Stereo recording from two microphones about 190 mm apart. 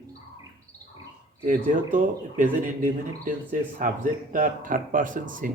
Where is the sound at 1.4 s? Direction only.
45° right (ahead or behind).